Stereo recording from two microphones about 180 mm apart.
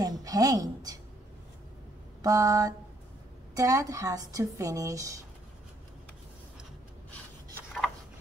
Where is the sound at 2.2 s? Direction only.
20° right (ahead or behind).